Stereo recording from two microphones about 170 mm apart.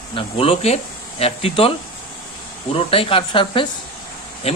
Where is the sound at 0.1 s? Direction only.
30° left (ahead or behind).